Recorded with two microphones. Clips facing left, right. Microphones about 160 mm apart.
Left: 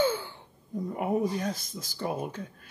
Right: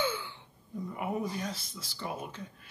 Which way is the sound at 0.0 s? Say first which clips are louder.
Left 6 dB; 45° left (ahead or behind).